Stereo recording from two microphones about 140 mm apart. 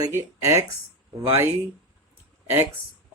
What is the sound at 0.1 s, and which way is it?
Speech, 20° right (ahead or behind).